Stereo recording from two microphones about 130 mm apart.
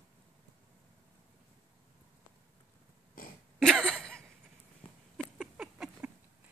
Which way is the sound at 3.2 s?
90° left.